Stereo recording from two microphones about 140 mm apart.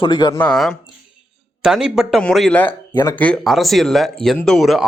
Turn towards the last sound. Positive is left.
turn(degrees=0)  # may be behind; listen again after turning